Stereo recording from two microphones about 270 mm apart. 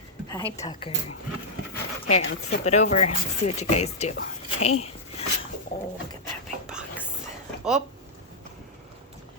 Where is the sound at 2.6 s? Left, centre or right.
Left.